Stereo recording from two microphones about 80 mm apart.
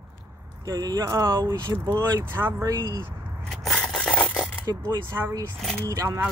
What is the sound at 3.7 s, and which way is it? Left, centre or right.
Rub, centre.